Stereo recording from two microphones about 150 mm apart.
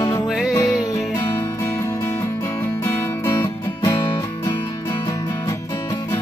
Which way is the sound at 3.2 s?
20° left (ahead or behind).